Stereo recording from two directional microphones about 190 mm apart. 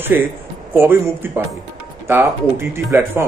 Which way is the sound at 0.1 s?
10° right (ahead or behind).